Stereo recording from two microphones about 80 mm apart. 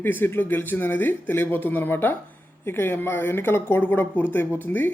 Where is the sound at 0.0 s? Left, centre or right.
Left.